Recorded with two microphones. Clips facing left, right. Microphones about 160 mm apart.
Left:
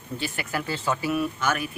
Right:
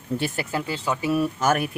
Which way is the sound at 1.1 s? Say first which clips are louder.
Right 7 dB; 40° right (ahead or behind).